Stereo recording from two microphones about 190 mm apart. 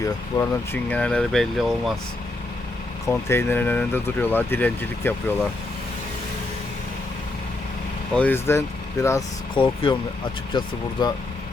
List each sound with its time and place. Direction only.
0.0 s speech: 15° left (ahead or behind)
3.1 s speech: 10° left (ahead or behind)
8.1 s speech: 10° left (ahead or behind)
9.6 s speech: 30° left (ahead or behind)
11.0 s speech: 25° left (ahead or behind)